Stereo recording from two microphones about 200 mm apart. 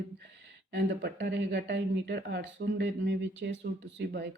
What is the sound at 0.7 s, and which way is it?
Speech, 60° right (ahead or behind).